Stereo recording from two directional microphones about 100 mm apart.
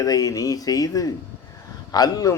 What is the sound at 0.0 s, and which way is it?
A man's voice, 40° left (ahead or behind).